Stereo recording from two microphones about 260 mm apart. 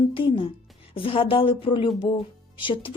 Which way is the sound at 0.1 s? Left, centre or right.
Centre.